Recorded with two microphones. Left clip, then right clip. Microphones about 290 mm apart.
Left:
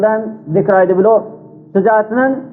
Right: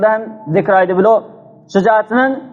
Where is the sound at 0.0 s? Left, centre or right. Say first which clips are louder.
Even; right.